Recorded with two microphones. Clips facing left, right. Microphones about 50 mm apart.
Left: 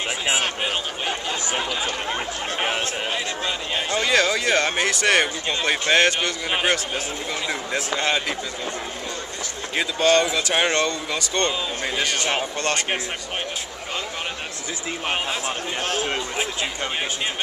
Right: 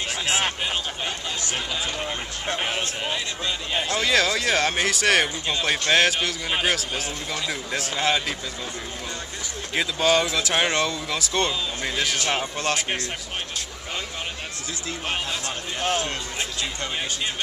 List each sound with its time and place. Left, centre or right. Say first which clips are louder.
2.0 s speech: left 2 dB; centre
3.7 s speech: left 1 dB; centre
9.8 s speech: left 2 dB; centre
15.0 s speech: left 3 dB; centre